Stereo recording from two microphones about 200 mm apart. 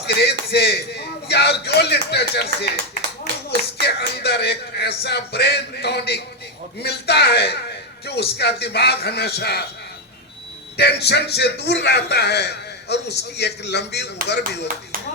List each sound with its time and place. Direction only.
0.0 s speech: 55° left (ahead or behind)
3.8 s a man's voice: 55° left (ahead or behind)
10.8 s a man's voice: 55° left (ahead or behind)